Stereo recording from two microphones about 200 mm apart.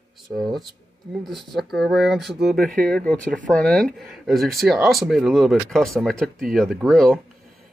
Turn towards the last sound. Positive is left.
turn(degrees=0)  # may be behind; listen again after turning